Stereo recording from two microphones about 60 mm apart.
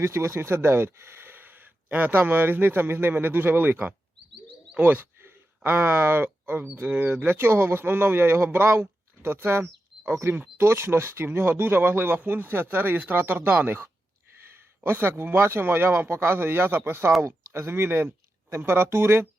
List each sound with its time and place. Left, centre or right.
0.0 s a woman's voice: right
14.3 s a sound: right
14.8 s speech: right